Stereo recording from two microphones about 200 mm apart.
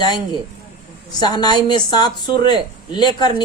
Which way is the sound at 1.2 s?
20° left (ahead or behind).